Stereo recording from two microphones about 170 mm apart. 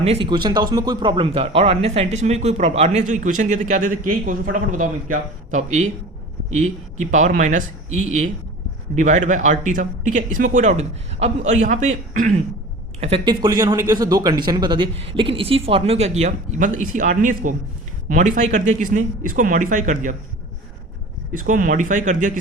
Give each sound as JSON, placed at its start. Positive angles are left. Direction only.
{"t": 0.0, "sound": "a man's voice", "side_deg": -35}
{"t": 13.0, "sound": "a man's voice", "side_deg": -35}
{"t": 13.4, "sound": "a man's voice", "side_deg": -20}
{"t": 21.3, "sound": "a man's voice", "side_deg": -50}